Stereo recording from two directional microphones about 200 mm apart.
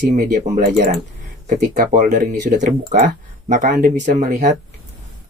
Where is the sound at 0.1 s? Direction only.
40° right (ahead or behind).